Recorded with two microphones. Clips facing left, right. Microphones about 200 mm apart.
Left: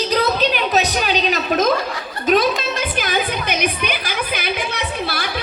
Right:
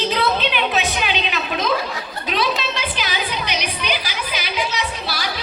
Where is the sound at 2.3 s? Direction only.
45° left (ahead or behind).